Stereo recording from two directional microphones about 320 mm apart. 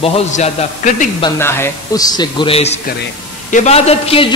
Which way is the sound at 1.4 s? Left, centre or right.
Centre.